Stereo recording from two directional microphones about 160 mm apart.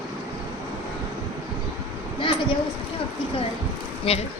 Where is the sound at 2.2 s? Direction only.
35° left (ahead or behind).